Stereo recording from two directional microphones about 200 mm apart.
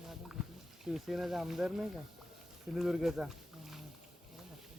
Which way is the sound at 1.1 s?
Centre (ahead or behind).